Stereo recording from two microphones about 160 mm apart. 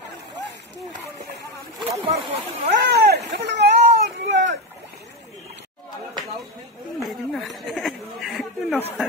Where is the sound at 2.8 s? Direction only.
90° right.